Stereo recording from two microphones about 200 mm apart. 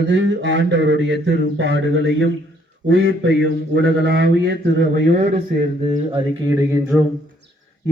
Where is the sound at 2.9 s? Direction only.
70° right (ahead or behind).